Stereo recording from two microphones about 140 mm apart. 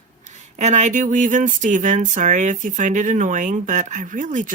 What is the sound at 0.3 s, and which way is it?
Speech, 60° right (ahead or behind).